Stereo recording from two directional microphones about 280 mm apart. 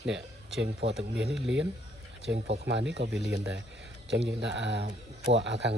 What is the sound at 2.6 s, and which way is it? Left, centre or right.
Speech, right.